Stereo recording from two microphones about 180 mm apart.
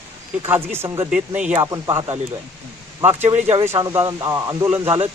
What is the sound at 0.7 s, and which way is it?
Speech, 15° right (ahead or behind).